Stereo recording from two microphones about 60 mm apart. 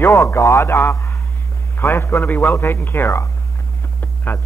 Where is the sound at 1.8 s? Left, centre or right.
Left.